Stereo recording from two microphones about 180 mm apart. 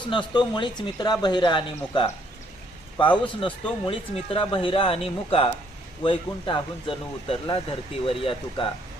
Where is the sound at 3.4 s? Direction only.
30° left (ahead or behind).